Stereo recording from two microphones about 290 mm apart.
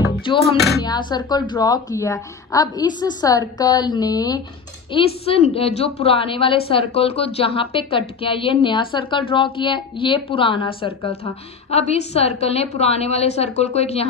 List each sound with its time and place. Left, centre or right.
0.2 s a woman's voice: centre